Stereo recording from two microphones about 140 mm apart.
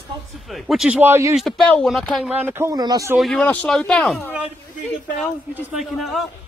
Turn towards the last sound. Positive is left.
turn(degrees=0)  # may be behind; listen again after turning